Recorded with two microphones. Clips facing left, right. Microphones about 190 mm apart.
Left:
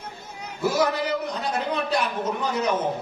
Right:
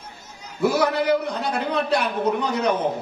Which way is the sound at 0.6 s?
60° right (ahead or behind).